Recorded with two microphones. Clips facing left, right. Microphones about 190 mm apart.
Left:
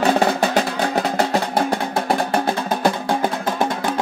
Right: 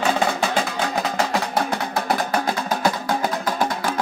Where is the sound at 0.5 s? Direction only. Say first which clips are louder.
Left 4 dB; 30° left (ahead or behind).